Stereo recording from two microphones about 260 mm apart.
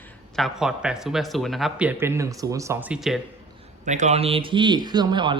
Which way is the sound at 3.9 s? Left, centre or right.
Right.